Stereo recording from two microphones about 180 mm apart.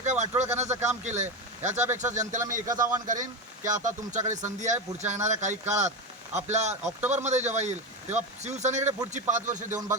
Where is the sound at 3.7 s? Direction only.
45° right (ahead or behind).